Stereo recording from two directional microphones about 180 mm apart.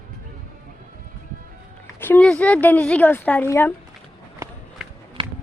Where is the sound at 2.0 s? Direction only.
10° left (ahead or behind).